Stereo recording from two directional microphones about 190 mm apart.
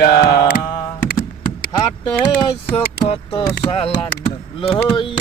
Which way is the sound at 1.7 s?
25° left (ahead or behind).